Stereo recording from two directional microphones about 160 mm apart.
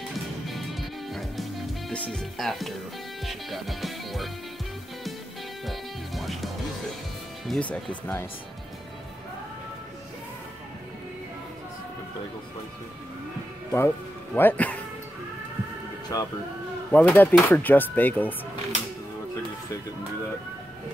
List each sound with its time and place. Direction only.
0.1 s music: centre (ahead or behind)
5.7 s music: centre (ahead or behind)
7.4 s speech: 5° left (ahead or behind)
13.7 s speech: 15° left (ahead or behind)
16.1 s speech: 20° left (ahead or behind)
16.9 s speech: 10° left (ahead or behind)